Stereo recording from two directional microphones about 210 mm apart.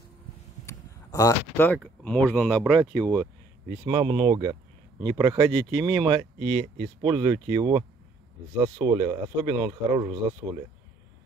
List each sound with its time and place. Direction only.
0.7 s speech: 15° left (ahead or behind)
3.7 s speech: 20° right (ahead or behind)